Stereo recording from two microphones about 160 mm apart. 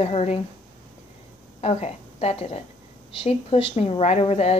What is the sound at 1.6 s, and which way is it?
A woman's voice, 40° left (ahead or behind).